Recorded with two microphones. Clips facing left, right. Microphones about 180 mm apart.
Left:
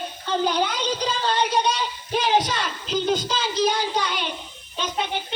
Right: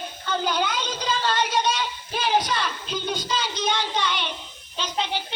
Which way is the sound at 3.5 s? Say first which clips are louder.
Left 7 dB; 40° left (ahead or behind).